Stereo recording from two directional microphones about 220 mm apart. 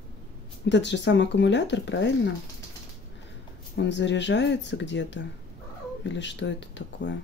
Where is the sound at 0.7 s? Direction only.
55° left (ahead or behind).